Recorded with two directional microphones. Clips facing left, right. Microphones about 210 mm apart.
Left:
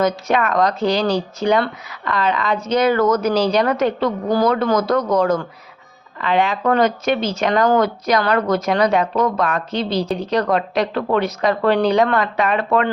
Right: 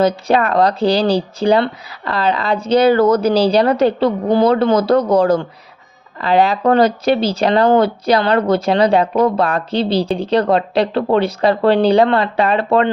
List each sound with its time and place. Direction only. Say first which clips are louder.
0.0 s speech: right 4 dB; 35° right (ahead or behind)